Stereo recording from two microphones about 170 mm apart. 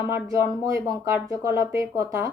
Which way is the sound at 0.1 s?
20° right (ahead or behind).